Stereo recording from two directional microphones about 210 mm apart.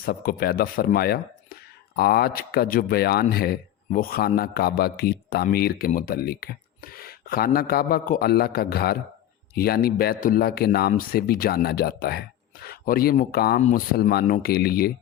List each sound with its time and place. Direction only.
0.0 s speech: 45° left (ahead or behind)
13.6 s speech: 35° left (ahead or behind)
13.9 s speech: 50° left (ahead or behind)